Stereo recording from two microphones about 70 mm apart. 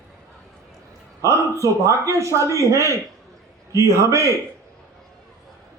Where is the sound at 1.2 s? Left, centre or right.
Right.